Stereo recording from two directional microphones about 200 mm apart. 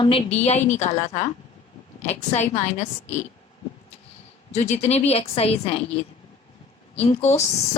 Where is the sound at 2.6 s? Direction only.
35° left (ahead or behind).